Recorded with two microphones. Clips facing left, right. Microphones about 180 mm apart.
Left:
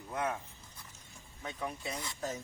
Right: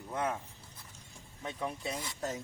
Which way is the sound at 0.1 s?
30° right (ahead or behind).